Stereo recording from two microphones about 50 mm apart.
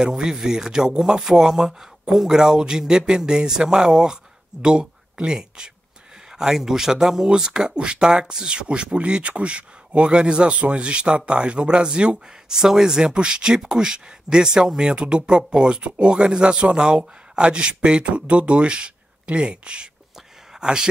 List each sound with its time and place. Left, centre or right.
0.0 s speech: centre